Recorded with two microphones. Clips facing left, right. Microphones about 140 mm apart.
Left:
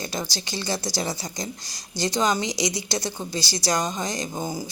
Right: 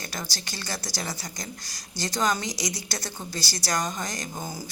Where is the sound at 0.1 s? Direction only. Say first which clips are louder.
Left 6 dB; 20° left (ahead or behind).